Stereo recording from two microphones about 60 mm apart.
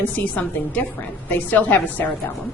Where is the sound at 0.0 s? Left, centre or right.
Left.